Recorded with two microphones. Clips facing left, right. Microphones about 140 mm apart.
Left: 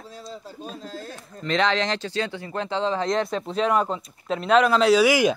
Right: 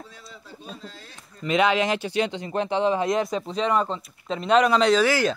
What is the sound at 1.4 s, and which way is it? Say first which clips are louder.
Speech: right 2 dB; 10° right (ahead or behind).